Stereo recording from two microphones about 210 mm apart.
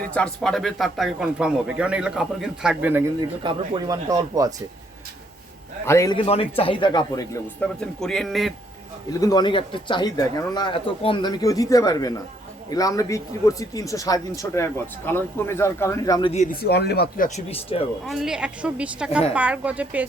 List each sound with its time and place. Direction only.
0.0 s speech: 5° left (ahead or behind); by 4.5 s 15° right (ahead or behind)
5.8 s speech: 15° left (ahead or behind)
7.6 s speech: 5° left (ahead or behind)
9.2 s a man's voice: 20° left (ahead or behind)
16.3 s speech: 40° left (ahead or behind)
17.2 s speech: 30° left (ahead or behind)
18.0 s speech: centre (ahead or behind)